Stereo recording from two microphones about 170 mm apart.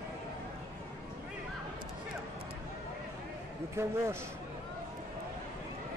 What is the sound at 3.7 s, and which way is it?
Speech, 15° right (ahead or behind).